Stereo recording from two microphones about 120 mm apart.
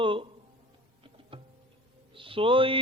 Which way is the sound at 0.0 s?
45° right (ahead or behind).